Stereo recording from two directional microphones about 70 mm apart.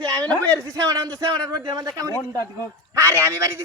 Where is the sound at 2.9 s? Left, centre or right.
Right.